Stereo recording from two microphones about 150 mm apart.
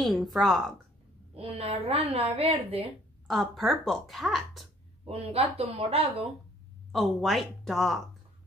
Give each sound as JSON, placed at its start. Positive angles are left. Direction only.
{"t": 0.0, "sound": "speech", "side_deg": 0}
{"t": 1.3, "sound": "a woman's voice", "side_deg": -40}
{"t": 3.3, "sound": "speech", "side_deg": 0}
{"t": 5.0, "sound": "a woman's voice", "side_deg": -45}
{"t": 6.9, "sound": "speech", "side_deg": 0}